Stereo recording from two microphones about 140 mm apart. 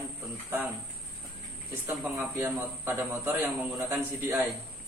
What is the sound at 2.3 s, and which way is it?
A man's voice, 20° right (ahead or behind).